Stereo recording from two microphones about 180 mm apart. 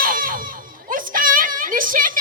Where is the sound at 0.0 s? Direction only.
50° right (ahead or behind).